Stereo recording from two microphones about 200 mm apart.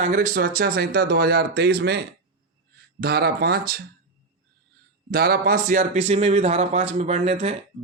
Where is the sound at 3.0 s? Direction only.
55° right (ahead or behind).